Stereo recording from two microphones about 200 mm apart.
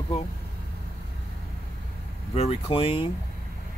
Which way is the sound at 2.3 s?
30° left (ahead or behind).